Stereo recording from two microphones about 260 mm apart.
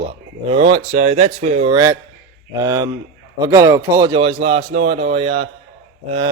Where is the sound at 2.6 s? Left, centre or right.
Centre.